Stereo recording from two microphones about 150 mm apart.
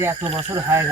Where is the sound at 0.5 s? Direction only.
20° right (ahead or behind).